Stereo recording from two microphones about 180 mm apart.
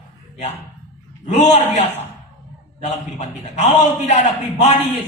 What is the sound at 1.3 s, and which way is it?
Speech, 40° left (ahead or behind).